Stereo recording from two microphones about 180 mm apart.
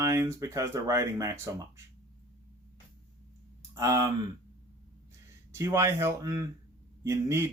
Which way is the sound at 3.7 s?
20° right (ahead or behind).